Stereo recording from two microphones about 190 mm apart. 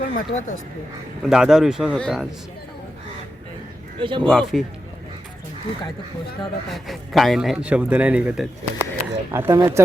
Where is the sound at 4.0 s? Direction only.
25° right (ahead or behind).